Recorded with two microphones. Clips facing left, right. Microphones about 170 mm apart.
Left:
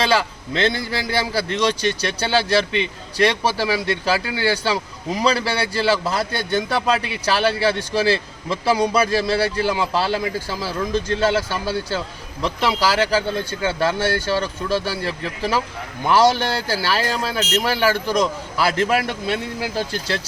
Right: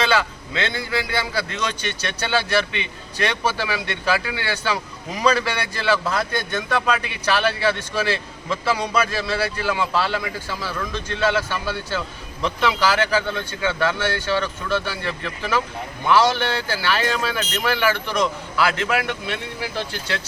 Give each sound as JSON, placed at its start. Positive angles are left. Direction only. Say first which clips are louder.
{"t": 0.0, "sound": "a man's voice", "louder": "left 1 dB", "side_deg": 35}